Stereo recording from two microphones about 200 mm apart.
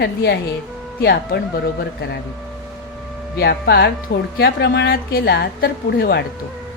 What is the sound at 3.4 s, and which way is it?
A woman's voice, 55° left (ahead or behind).